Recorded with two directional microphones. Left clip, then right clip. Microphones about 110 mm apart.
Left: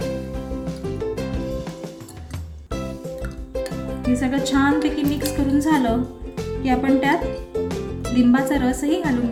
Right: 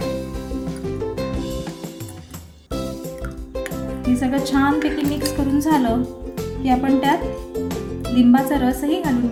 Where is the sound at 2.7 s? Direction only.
Centre (ahead or behind).